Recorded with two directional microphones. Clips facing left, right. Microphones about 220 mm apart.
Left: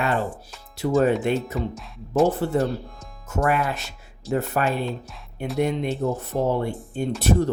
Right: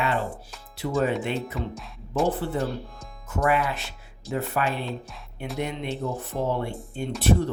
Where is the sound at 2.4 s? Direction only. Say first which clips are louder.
Left 5 dB; 45° left (ahead or behind).